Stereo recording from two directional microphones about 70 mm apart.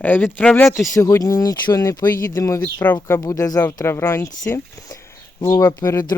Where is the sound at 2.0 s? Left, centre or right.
Left.